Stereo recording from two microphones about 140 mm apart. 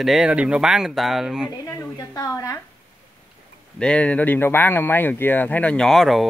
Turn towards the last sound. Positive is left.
turn(degrees=0)  # may be behind; listen again after turning